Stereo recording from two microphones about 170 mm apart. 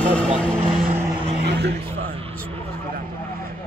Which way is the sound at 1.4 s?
75° right (ahead or behind).